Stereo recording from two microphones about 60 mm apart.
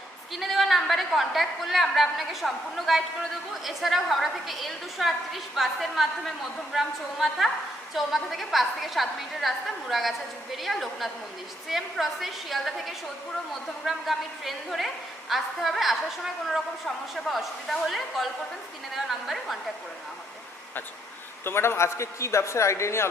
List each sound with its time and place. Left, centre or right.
0.3 s a woman's voice: centre
21.4 s a man's voice: left